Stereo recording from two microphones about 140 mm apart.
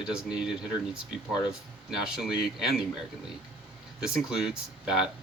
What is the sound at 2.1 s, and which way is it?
Speech, 5° right (ahead or behind).